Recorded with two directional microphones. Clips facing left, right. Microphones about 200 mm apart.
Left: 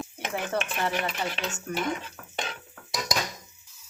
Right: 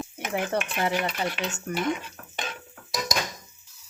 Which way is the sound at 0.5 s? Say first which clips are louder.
Even; 15° right (ahead or behind).